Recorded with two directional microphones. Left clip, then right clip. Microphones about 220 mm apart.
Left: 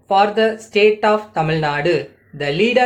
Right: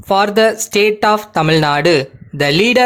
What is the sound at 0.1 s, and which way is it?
Speech, 50° right (ahead or behind).